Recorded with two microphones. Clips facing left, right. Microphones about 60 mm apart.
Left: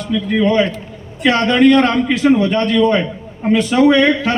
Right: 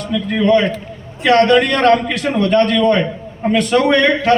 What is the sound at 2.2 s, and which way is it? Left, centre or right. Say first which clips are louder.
Speech: left 3 dB; centre.